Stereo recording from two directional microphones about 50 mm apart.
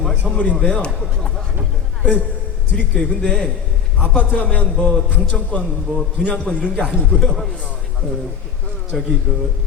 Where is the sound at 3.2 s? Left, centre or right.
Centre.